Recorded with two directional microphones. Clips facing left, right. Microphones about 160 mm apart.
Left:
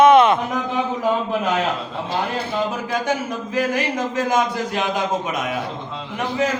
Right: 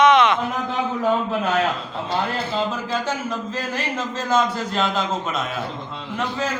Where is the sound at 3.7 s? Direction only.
15° left (ahead or behind).